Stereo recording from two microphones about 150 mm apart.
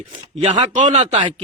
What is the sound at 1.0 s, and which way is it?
Speech, 40° right (ahead or behind).